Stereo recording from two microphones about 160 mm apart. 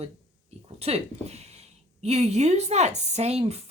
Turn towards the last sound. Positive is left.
turn(degrees=-40)  # may be behind; listen again after turning